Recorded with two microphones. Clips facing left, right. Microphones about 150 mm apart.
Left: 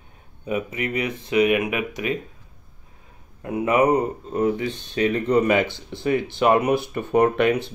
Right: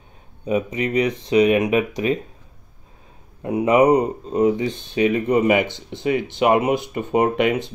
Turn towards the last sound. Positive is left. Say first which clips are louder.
# even
turn(degrees=-15)  # may be behind; listen again after turning